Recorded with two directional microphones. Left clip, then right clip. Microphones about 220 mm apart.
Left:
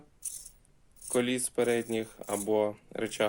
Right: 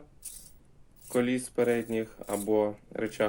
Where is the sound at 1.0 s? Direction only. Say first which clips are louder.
Right 1 dB; 30° left (ahead or behind).